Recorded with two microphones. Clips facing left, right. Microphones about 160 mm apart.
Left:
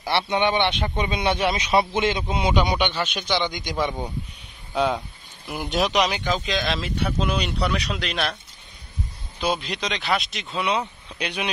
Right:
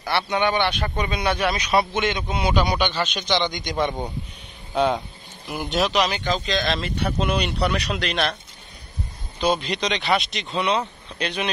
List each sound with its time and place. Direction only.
0.0 s speech: 25° left (ahead or behind); by 3.7 s 5° left (ahead or behind)
5.5 s speech: 5° left (ahead or behind)
9.4 s speech: centre (ahead or behind)